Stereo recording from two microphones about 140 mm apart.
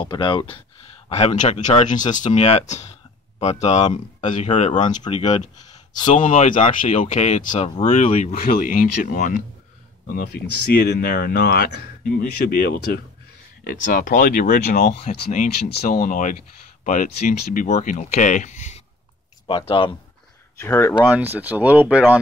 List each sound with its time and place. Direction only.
0.0 s speech: 35° left (ahead or behind)
1.1 s speech: 55° left (ahead or behind)
5.1 s speech: 45° left (ahead or behind)
6.0 s speech: 65° left (ahead or behind)
10.0 s speech: 90° left; by 18.8 s 60° left (ahead or behind)
19.4 s speech: 35° left (ahead or behind)
20.5 s speech: 15° left (ahead or behind)
21.1 s speech: 15° right (ahead or behind)